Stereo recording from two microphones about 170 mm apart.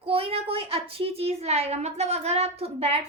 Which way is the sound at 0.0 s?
35° right (ahead or behind).